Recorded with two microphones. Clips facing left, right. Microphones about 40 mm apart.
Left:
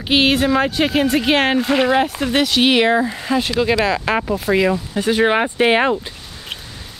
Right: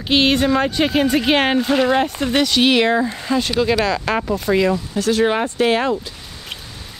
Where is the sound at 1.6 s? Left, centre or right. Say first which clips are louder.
Even; centre.